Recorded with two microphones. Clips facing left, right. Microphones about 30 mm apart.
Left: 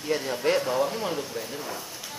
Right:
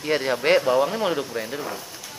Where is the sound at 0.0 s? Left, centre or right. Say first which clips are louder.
Right 4 dB; right.